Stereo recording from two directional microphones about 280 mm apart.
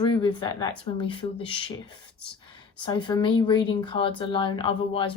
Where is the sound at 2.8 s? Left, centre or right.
Centre.